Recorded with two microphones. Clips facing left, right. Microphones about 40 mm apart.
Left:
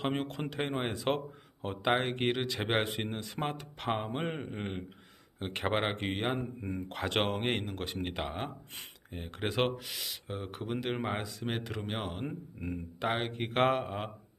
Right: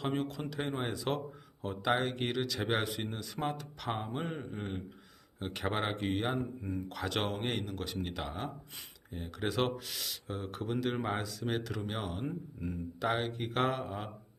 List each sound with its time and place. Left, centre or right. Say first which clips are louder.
0.0 s speech: left 1 dB; left